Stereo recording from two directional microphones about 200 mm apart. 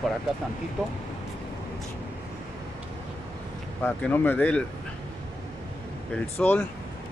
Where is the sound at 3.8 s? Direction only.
10° left (ahead or behind).